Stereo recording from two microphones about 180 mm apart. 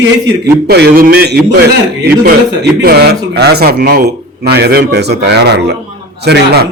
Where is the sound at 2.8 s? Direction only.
60° right (ahead or behind).